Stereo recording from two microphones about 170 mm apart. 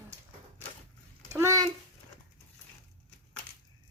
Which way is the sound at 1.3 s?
15° right (ahead or behind).